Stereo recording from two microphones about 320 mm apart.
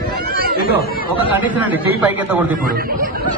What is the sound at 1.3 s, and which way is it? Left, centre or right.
A man's voice, centre.